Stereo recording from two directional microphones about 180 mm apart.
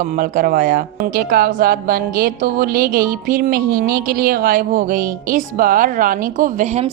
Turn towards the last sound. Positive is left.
turn(degrees=-40)  # may be behind; listen again after turning